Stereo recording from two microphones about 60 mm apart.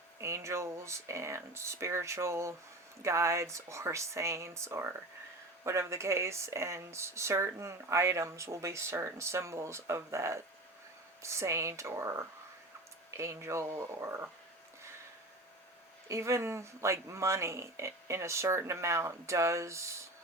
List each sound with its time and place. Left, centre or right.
0.2 s speech: right
16.0 s speech: right